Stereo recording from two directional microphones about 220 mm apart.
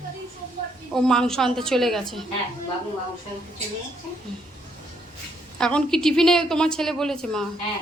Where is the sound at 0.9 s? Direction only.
5° left (ahead or behind).